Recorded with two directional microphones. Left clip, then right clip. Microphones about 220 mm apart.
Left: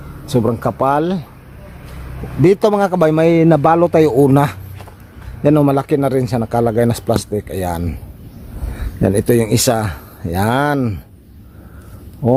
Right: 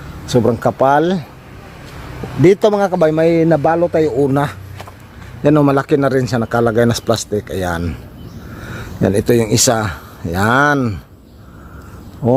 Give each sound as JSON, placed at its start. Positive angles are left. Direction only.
{"t": 0.3, "sound": "speech", "side_deg": 0}
{"t": 2.4, "sound": "a man's voice", "side_deg": 5}
{"t": 5.4, "sound": "speech", "side_deg": 0}
{"t": 9.0, "sound": "speech", "side_deg": 5}
{"t": 12.2, "sound": "speech", "side_deg": -5}